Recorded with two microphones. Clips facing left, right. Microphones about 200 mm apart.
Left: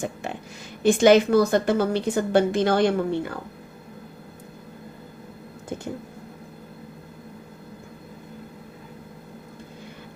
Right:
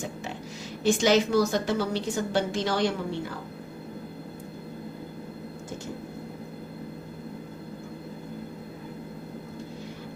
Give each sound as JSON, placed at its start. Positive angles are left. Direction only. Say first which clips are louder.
{"t": 0.8, "sound": "a woman's voice", "louder": "left 6 dB", "side_deg": 55}